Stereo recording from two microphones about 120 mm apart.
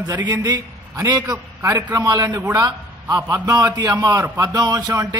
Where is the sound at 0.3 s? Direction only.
25° right (ahead or behind).